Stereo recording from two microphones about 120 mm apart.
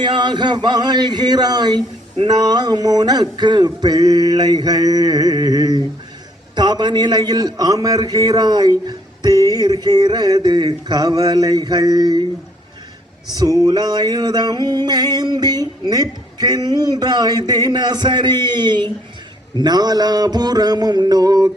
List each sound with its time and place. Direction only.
0.0 s a man's voice: 40° right (ahead or behind)
13.3 s a man's voice: 30° right (ahead or behind)